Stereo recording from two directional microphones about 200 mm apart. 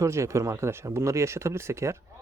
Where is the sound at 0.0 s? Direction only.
15° right (ahead or behind).